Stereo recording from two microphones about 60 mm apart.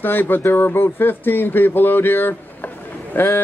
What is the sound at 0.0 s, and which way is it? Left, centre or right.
Speech, left.